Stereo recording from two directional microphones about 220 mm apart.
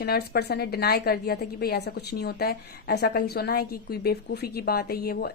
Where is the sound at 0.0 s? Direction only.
45° left (ahead or behind).